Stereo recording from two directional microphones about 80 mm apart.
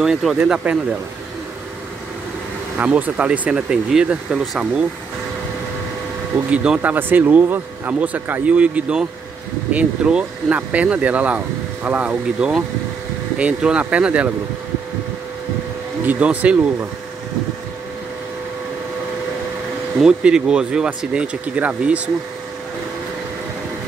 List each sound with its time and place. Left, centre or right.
0.0 s speech: centre
0.4 s speech: centre
2.8 s speech: centre
6.5 s speech: centre
16.1 s speech: centre
20.0 s speech: centre